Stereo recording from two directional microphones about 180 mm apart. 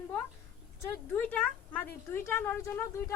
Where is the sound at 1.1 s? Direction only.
10° left (ahead or behind).